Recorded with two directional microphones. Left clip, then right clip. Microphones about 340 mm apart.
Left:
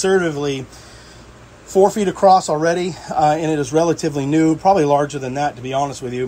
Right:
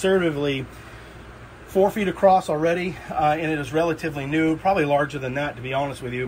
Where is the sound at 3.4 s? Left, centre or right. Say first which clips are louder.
Left 6 dB; centre.